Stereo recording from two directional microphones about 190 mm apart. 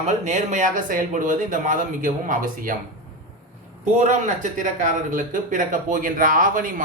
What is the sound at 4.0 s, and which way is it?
Speech, 40° right (ahead or behind).